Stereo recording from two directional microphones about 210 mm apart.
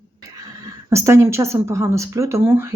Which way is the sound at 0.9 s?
15° right (ahead or behind).